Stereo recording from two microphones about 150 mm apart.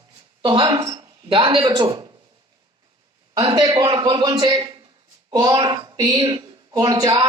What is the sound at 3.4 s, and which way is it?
A man's voice, 30° right (ahead or behind).